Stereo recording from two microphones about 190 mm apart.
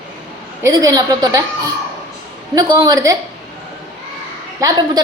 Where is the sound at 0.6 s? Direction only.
20° right (ahead or behind).